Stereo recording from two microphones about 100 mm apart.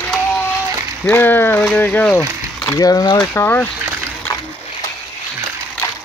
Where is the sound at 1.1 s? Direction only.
20° left (ahead or behind).